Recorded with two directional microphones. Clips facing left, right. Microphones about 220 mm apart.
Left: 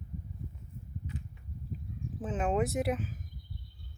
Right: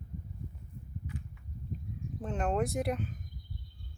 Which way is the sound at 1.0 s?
20° left (ahead or behind).